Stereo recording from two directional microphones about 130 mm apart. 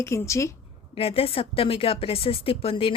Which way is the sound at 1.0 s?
45° left (ahead or behind).